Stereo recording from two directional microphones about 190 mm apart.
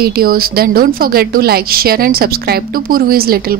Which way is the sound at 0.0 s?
50° right (ahead or behind).